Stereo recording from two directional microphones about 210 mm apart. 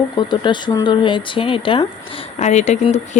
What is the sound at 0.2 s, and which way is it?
Speech, 20° left (ahead or behind).